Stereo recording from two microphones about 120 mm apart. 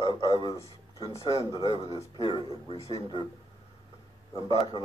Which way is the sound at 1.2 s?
45° right (ahead or behind).